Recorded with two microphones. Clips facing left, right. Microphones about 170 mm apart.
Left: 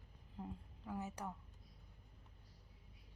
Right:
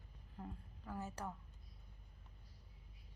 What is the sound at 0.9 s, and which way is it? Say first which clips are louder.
Speech: left 1 dB; 15° left (ahead or behind).